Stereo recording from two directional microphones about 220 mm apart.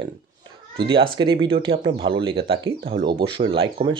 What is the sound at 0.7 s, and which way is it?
Speech, 20° right (ahead or behind).